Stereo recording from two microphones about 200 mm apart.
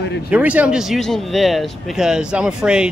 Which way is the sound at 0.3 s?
5° right (ahead or behind).